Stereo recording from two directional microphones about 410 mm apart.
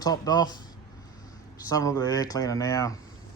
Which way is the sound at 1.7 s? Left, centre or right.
Centre.